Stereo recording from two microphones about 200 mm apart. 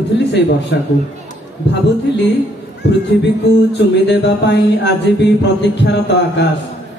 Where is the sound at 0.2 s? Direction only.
60° left (ahead or behind).